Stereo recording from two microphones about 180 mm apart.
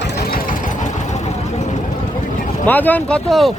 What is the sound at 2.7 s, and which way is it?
Speech, 10° left (ahead or behind).